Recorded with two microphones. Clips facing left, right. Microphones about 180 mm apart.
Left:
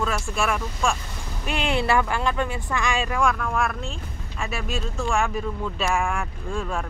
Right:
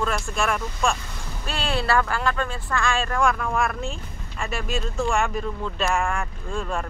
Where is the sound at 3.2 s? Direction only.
Centre (ahead or behind).